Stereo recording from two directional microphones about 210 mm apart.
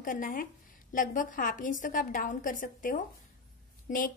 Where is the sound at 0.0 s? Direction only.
40° left (ahead or behind).